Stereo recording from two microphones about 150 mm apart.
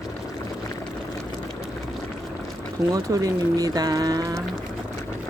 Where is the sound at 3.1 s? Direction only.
20° right (ahead or behind).